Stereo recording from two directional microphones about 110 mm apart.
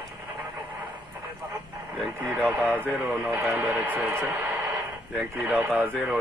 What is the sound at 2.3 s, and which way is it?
A man's voice, 20° right (ahead or behind).